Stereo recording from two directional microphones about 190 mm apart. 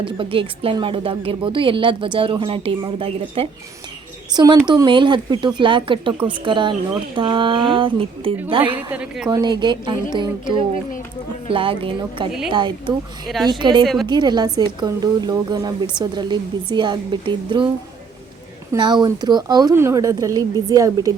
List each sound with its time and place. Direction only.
0.0 s speech: 25° right (ahead or behind)
8.7 s a woman's voice: 5° right (ahead or behind)
9.3 s speech: 25° right (ahead or behind)
13.2 s a woman's voice: centre (ahead or behind)
13.5 s speech: 25° right (ahead or behind)
13.8 s a woman's voice: centre (ahead or behind)
14.1 s speech: 20° right (ahead or behind)
18.7 s speech: 25° right (ahead or behind)